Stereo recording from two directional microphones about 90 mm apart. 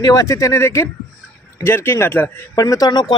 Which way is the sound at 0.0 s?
40° left (ahead or behind).